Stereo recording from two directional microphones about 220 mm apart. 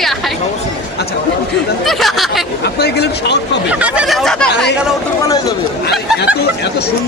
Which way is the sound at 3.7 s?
5° right (ahead or behind).